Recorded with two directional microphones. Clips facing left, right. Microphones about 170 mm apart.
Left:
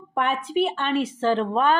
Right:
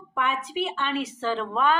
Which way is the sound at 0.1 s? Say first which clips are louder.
Left 3 dB; 50° left (ahead or behind).